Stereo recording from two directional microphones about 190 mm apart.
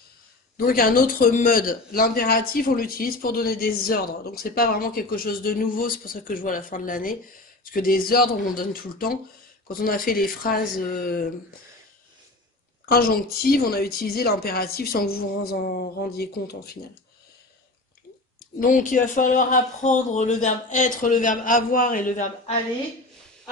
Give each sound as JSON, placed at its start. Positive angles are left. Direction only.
{"t": 0.6, "sound": "a man's voice", "side_deg": 50}
{"t": 12.8, "sound": "a man's voice", "side_deg": 55}
{"t": 18.6, "sound": "a man's voice", "side_deg": 45}